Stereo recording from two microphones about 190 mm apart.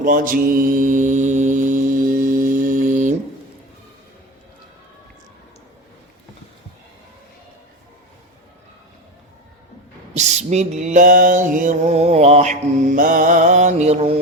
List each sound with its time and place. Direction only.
0.0 s mantra: 50° right (ahead or behind)
10.2 s mantra: 35° right (ahead or behind)